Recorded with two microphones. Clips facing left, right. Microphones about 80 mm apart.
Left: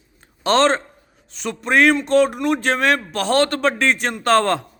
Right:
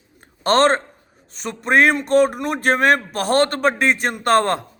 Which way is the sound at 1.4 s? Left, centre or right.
Right.